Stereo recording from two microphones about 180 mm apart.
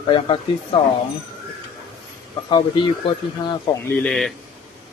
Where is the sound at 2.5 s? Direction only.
25° left (ahead or behind).